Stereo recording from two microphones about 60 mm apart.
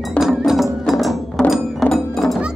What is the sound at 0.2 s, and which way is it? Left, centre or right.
Music, left.